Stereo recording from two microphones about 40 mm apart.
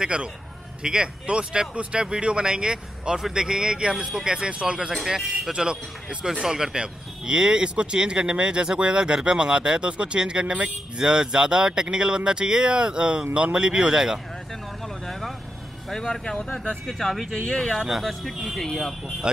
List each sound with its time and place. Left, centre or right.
0.0 s speech: right
3.2 s a man's voice: centre
3.4 s speech: right
4.9 s speech: centre
5.5 s speech: centre
15.0 s vehicle: centre
15.9 s speech: centre
17.5 s speech: left
17.8 s speech: centre
18.6 s speech: centre